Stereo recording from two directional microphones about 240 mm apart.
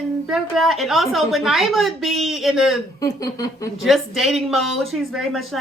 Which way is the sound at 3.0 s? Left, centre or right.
Centre.